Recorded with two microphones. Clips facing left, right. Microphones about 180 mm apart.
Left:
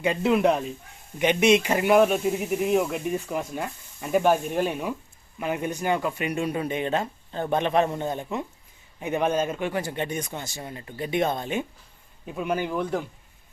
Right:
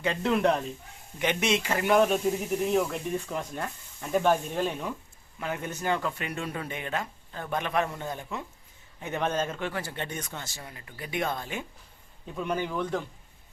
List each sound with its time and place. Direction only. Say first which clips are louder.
0.0 s speech: left 4 dB; 10° left (ahead or behind)
12.2 s speech: left 3 dB; 10° left (ahead or behind)